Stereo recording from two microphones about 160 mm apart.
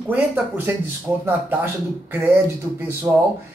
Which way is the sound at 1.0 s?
15° right (ahead or behind).